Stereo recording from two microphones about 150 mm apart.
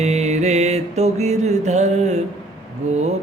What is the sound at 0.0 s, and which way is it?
Mantra, 45° right (ahead or behind).